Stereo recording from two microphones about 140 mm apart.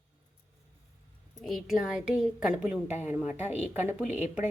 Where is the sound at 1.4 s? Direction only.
Centre (ahead or behind).